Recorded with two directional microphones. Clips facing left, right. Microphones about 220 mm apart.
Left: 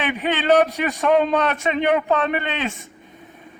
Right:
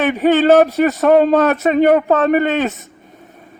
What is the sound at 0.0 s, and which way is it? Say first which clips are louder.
A man's voice: right 10 dB; 45° right (ahead or behind).